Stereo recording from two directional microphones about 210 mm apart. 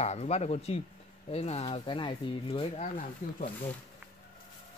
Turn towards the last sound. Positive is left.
turn(degrees=35)  # may be behind; listen again after turning